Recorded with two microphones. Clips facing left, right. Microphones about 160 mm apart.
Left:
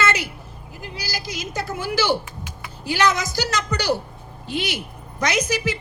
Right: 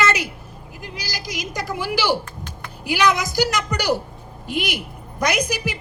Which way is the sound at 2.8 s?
15° right (ahead or behind).